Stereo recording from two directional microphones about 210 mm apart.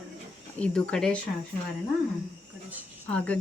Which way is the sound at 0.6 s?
5° left (ahead or behind).